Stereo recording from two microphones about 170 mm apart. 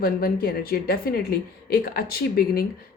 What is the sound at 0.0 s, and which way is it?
Speech, 60° left (ahead or behind).